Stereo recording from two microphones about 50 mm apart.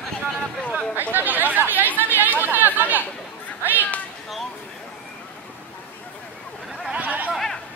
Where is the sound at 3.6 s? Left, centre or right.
Right.